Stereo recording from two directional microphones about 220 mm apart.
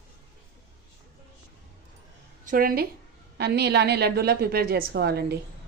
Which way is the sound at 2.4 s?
40° right (ahead or behind).